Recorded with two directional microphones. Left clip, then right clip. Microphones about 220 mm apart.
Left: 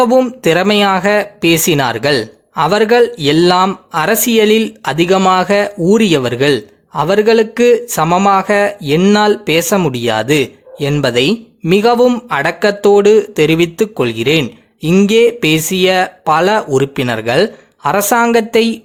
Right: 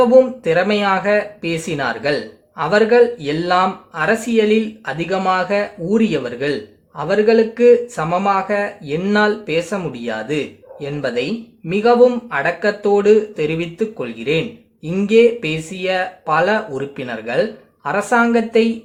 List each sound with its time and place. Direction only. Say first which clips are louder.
0.0 s speech: left 1 dB; 45° left (ahead or behind)